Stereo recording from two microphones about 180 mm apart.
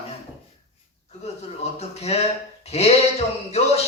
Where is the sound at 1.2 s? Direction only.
35° left (ahead or behind).